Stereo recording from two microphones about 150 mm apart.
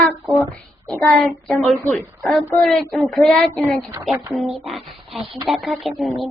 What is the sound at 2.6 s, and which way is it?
Speech, centre (ahead or behind).